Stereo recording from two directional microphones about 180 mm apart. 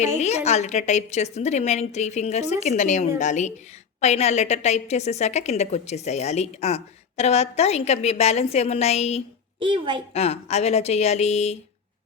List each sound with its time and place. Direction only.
0.2 s a woman's voice: 40° left (ahead or behind)
9.6 s a child's voice: 25° right (ahead or behind)
10.1 s a woman's voice: 35° left (ahead or behind)